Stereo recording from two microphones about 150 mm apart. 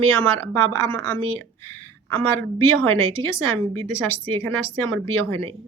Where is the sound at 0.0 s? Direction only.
15° left (ahead or behind).